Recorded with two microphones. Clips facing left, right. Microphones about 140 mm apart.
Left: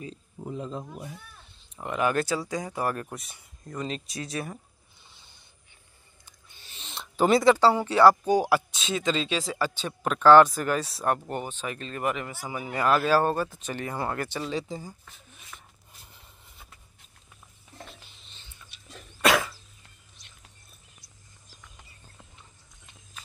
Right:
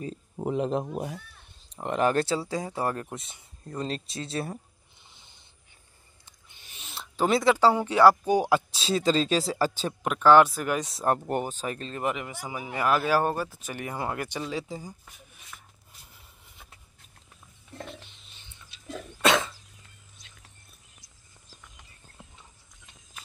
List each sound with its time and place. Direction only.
0.4 s speech: 75° right (ahead or behind)
1.8 s speech: 35° right (ahead or behind)
5.0 s a sound: 20° right (ahead or behind); by 7.5 s centre (ahead or behind)
7.5 s speech: 10° right (ahead or behind)
8.7 s speech: 35° right (ahead or behind)
10.0 s speech: 10° right (ahead or behind)
11.2 s speech: 45° right (ahead or behind)
11.9 s speech: 20° right (ahead or behind); by 14.9 s 5° right (ahead or behind)
15.0 s a sound: 15° right (ahead or behind)
17.7 s a sound: centre (ahead or behind)
19.2 s cough: 25° right (ahead or behind)